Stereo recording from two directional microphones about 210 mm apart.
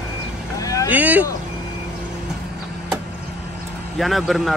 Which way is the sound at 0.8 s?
10° right (ahead or behind).